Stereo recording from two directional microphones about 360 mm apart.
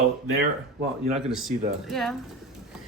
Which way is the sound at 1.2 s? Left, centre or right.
Centre.